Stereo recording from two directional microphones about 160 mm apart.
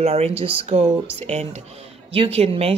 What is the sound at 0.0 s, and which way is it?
Speech, 40° right (ahead or behind).